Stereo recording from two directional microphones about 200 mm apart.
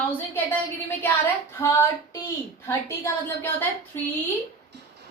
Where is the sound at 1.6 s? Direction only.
15° left (ahead or behind).